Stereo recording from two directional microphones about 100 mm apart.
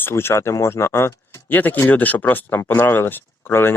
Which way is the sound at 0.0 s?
25° left (ahead or behind).